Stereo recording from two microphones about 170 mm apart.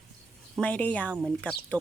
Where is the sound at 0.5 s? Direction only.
5° left (ahead or behind).